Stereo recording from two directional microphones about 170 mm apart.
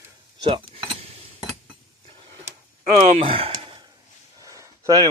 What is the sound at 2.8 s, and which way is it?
Speech, 35° right (ahead or behind).